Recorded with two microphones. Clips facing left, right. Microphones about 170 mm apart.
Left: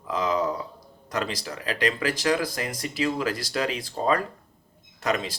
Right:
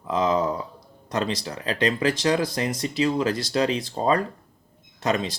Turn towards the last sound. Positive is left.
turn(degrees=-25)  # may be behind; listen again after turning